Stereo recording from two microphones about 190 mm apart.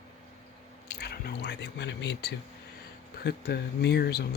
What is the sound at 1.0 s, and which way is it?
Speech, 55° left (ahead or behind).